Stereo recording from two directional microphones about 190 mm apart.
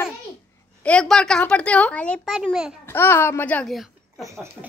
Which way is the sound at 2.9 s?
10° left (ahead or behind).